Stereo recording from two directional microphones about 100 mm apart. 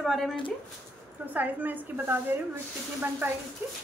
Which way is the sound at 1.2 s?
15° right (ahead or behind).